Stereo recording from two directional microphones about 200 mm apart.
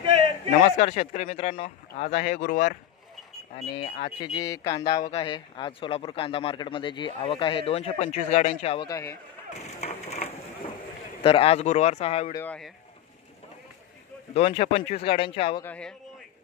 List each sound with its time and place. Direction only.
0.6 s speech: 35° left (ahead or behind)
3.5 s speech: 30° left (ahead or behind)
9.8 s a sound: 30° left (ahead or behind)
11.2 s speech: 30° left (ahead or behind)
12.4 s speech: 5° left (ahead or behind)
14.3 s speech: 30° left (ahead or behind)
15.6 s a man's voice: 5° left (ahead or behind)